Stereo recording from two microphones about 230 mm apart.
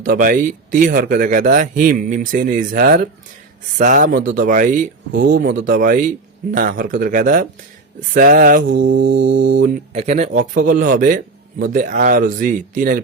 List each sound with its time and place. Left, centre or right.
0.0 s speech: right
9.1 s mantra: right
9.6 s speech: right